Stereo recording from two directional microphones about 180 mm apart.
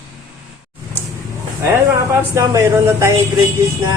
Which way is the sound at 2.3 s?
20° right (ahead or behind).